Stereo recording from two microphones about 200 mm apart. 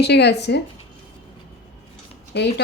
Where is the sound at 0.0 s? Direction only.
55° left (ahead or behind).